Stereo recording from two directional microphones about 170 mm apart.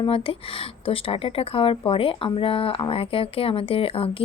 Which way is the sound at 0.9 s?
35° left (ahead or behind).